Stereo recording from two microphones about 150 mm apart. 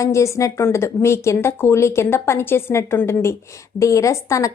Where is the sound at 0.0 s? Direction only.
20° left (ahead or behind).